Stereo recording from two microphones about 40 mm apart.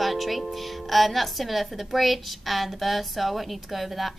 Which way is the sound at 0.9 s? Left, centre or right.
Centre.